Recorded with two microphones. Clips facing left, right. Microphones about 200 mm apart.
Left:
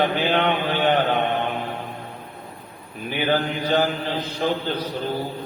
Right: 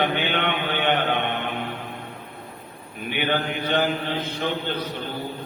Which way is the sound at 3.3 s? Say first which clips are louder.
Left 4 dB; 35° left (ahead or behind).